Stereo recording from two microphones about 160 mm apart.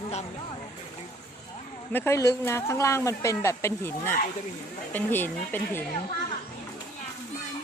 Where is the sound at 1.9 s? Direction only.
15° left (ahead or behind).